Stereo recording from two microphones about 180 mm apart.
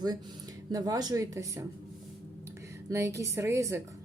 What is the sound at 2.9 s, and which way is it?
Speech, 15° right (ahead or behind).